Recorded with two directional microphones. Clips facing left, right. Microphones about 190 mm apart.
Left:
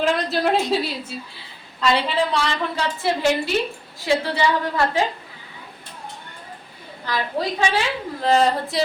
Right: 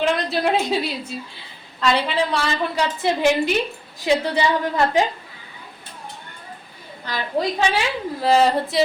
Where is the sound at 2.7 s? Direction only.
15° right (ahead or behind).